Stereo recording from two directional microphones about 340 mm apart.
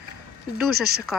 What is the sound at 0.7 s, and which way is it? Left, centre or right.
Speech, right.